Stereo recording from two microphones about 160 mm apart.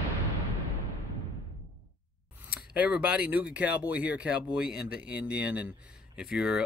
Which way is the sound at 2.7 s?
10° right (ahead or behind).